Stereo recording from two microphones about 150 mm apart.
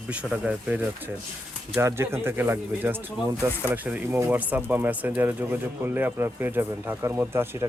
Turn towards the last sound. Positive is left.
turn(degrees=-15)  # may be behind; listen again after turning